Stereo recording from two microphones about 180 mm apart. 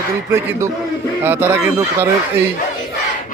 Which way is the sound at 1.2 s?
10° right (ahead or behind).